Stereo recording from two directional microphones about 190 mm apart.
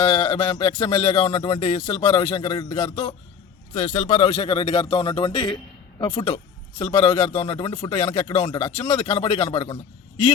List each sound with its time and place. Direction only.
0.0 s speech: 25° left (ahead or behind)